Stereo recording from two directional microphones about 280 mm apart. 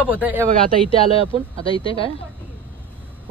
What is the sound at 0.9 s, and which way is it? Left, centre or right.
A woman's voice, centre.